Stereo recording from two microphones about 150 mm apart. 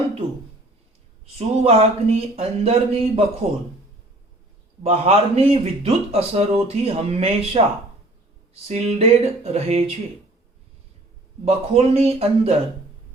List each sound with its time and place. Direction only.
1.4 s speech: 45° right (ahead or behind)
4.8 s speech: 45° right (ahead or behind)
8.6 s speech: 40° right (ahead or behind)
11.4 s speech: 45° right (ahead or behind)